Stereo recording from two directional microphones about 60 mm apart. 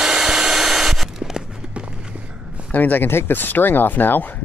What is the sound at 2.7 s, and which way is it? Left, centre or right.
Speech, left.